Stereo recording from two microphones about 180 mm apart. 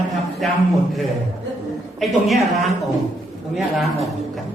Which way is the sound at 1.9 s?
Centre (ahead or behind).